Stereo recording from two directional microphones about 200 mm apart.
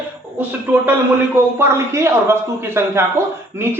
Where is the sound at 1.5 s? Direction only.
15° right (ahead or behind).